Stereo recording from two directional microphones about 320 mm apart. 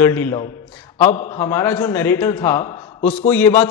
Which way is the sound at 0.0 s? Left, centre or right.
Centre.